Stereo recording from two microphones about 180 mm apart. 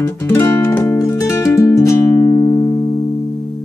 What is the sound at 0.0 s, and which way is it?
Music, 15° left (ahead or behind).